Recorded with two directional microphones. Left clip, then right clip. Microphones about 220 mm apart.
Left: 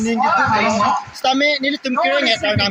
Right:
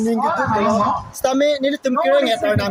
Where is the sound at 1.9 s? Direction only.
55° right (ahead or behind).